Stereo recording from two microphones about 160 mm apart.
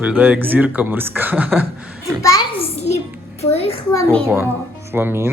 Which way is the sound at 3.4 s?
40° left (ahead or behind).